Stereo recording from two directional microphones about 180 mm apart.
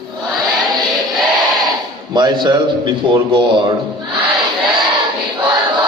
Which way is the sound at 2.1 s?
25° right (ahead or behind).